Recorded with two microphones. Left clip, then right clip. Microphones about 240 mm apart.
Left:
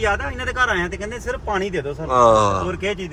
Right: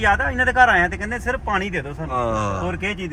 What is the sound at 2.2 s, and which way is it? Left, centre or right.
Speech, centre.